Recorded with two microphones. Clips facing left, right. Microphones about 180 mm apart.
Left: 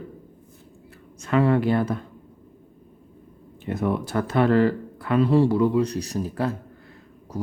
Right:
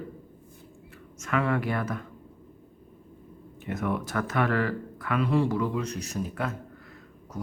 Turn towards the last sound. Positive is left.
turn(degrees=30)  # may be behind; listen again after turning